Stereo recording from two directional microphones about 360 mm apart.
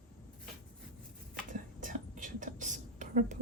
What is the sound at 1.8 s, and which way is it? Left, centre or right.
Whispering, right.